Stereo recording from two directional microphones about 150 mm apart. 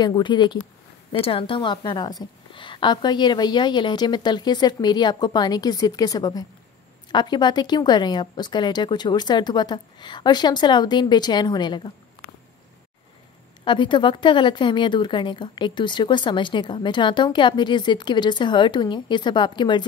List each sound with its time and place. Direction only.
0.0 s a woman's voice: 30° left (ahead or behind)
13.7 s a woman's voice: 30° left (ahead or behind)